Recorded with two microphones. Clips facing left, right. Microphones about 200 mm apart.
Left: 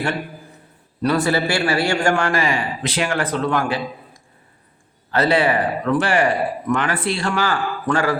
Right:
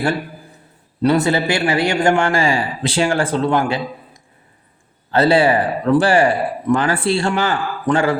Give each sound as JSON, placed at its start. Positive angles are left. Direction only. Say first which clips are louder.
{"t": 1.0, "sound": "a man's voice", "louder": "right 3 dB", "side_deg": -25}